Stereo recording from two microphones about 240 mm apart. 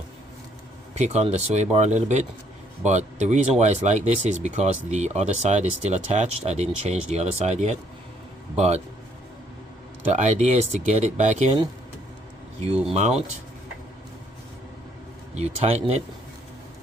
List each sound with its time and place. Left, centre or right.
0.9 s speech: right
10.1 s speech: right
12.9 s speech: right
15.4 s speech: right